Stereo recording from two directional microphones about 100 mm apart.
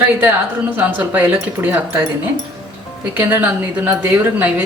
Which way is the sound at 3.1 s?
15° right (ahead or behind).